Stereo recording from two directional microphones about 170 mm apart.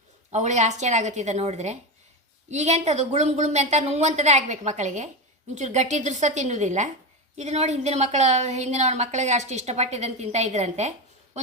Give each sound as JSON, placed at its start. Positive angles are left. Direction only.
{"t": 0.3, "sound": "a woman's voice", "side_deg": -45}